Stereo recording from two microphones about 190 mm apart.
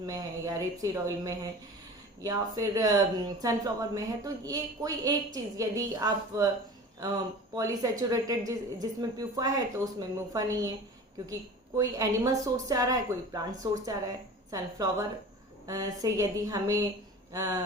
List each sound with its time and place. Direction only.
0.0 s speech: 20° right (ahead or behind)
11.8 s speech: 20° right (ahead or behind)